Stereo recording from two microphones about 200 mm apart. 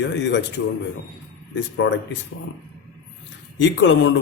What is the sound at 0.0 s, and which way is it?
Speech, 60° left (ahead or behind).